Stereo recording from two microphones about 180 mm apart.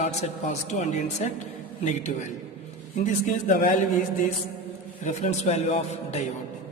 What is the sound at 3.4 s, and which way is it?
Speech, 45° left (ahead or behind).